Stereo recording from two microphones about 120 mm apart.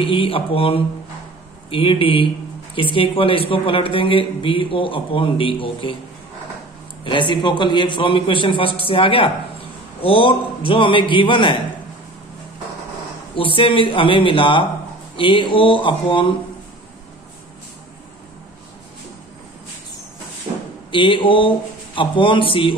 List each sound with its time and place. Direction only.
0.0 s a man's voice: 50° left (ahead or behind)
7.1 s a man's voice: 40° left (ahead or behind)
13.4 s a man's voice: 45° left (ahead or behind)
20.9 s a man's voice: 40° left (ahead or behind)